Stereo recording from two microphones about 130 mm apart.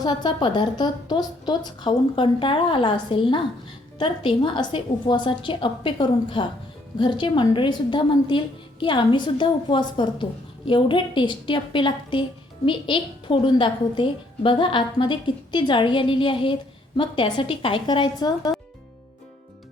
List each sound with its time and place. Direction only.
0.0 s a woman's voice: 35° left (ahead or behind)